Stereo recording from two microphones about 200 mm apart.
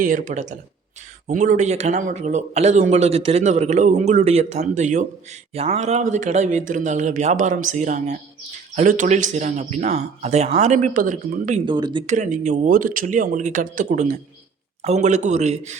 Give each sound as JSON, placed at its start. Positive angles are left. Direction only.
{"t": 0.0, "sound": "a man's voice", "side_deg": -40}
{"t": 11.6, "sound": "speech", "side_deg": -25}
{"t": 12.0, "sound": "a man's voice", "side_deg": -40}